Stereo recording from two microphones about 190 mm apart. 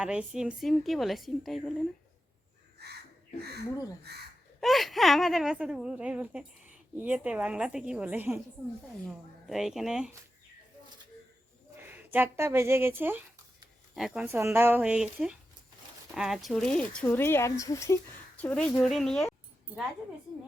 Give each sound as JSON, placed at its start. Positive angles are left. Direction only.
{"t": 0.0, "sound": "speech", "side_deg": -5}
{"t": 2.8, "sound": "speech", "side_deg": -60}
{"t": 4.6, "sound": "speech", "side_deg": 0}
{"t": 11.8, "sound": "speech", "side_deg": -10}